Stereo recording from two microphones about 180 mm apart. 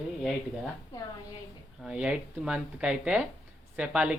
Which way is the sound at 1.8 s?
5° right (ahead or behind).